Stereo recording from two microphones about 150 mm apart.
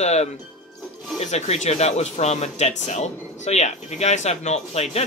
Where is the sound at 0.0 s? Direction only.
45° left (ahead or behind).